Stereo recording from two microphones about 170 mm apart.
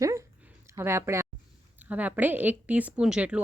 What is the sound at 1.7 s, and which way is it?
A woman's voice, 10° right (ahead or behind).